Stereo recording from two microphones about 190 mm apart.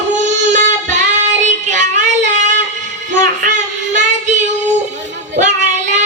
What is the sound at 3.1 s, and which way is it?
Child singing, 40° right (ahead or behind).